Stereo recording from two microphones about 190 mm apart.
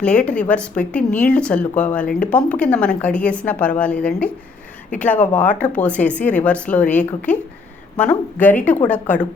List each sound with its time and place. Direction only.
0.0 s speech: 5° left (ahead or behind)
8.4 s speech: 10° left (ahead or behind)